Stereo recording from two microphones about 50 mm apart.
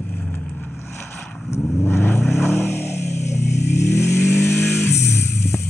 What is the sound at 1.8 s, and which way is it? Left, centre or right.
Vehicle, left.